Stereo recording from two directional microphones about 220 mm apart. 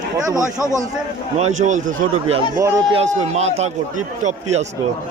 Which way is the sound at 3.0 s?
30° right (ahead or behind).